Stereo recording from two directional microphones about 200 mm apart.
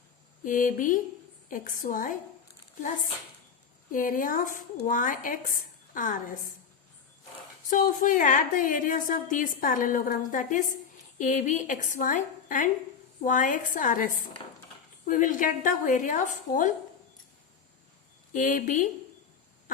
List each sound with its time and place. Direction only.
0.4 s a woman's voice: 40° left (ahead or behind)
3.9 s a woman's voice: 40° left (ahead or behind)
7.7 s a woman's voice: 40° left (ahead or behind)
18.3 s a woman's voice: 40° left (ahead or behind)